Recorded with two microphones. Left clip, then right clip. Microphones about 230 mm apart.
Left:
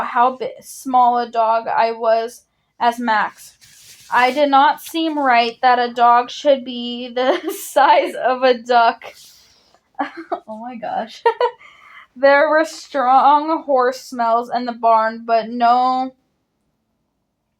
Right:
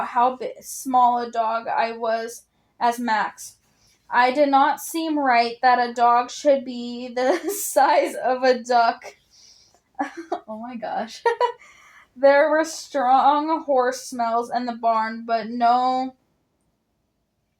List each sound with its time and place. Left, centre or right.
0.1 s speech: left
10.8 s speech: left